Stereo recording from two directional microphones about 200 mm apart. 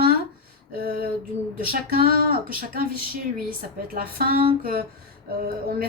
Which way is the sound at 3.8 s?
50° right (ahead or behind).